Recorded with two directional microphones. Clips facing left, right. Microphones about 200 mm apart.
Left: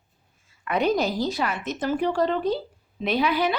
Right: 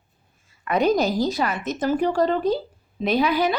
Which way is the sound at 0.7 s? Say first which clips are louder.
Right 3 dB; 40° right (ahead or behind).